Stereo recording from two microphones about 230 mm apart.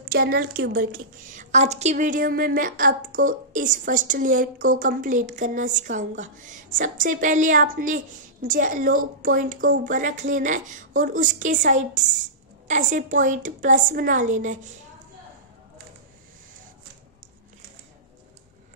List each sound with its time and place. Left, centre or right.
0.0 s a woman's voice: right